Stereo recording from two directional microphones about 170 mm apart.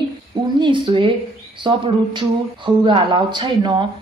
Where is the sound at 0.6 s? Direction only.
30° right (ahead or behind).